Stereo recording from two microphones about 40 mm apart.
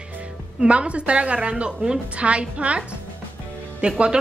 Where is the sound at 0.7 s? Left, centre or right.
Right.